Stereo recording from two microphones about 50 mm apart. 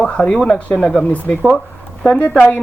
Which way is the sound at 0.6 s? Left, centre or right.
Left.